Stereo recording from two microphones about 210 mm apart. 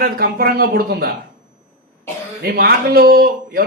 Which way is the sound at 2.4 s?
45° right (ahead or behind).